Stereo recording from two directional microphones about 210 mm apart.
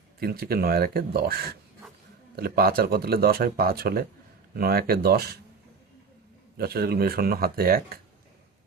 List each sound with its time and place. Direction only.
0.2 s speech: 45° right (ahead or behind)
6.6 s speech: 50° right (ahead or behind)